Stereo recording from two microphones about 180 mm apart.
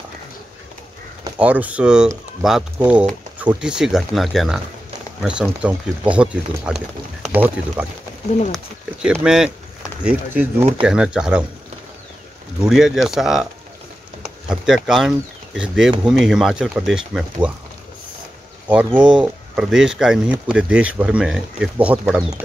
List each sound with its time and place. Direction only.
1.4 s speech: 5° right (ahead or behind)
9.0 s speech: 5° right (ahead or behind)
12.6 s speech: centre (ahead or behind)
14.2 s a sound: 5° right (ahead or behind)
14.9 s speech: centre (ahead or behind)
18.9 s speech: 25° right (ahead or behind)
19.2 s speech: 5° right (ahead or behind)